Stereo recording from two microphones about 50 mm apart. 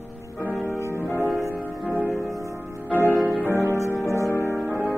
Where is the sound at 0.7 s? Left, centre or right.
Left.